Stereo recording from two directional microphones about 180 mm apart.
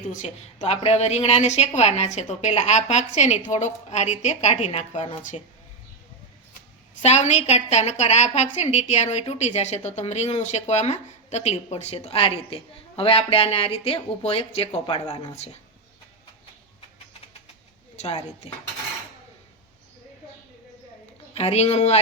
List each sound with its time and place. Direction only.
0.1 s a woman's voice: 40° left (ahead or behind)
7.0 s a woman's voice: 40° left (ahead or behind)
17.9 s speech: 40° left (ahead or behind)
21.3 s a woman's voice: 35° left (ahead or behind)